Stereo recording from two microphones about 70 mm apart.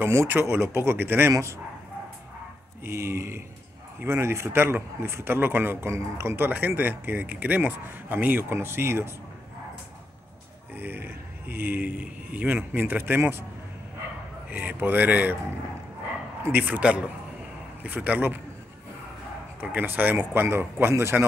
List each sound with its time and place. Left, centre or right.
0.0 s a man's voice: right
2.8 s a man's voice: right
10.8 s speech: right
14.5 s speech: right
16.5 s speech: right
19.6 s a man's voice: right